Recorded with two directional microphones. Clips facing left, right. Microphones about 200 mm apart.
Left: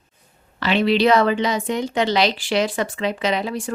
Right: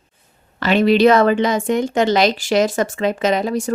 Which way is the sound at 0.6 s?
45° right (ahead or behind).